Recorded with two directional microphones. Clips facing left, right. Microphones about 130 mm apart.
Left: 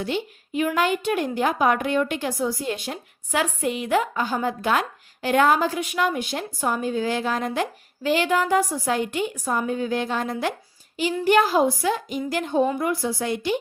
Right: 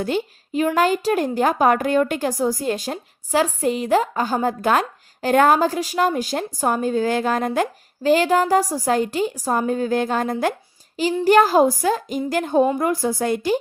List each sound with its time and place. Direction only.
0.0 s a woman's voice: 45° right (ahead or behind)